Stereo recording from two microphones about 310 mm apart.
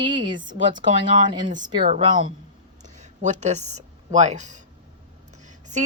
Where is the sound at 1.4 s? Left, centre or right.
Centre.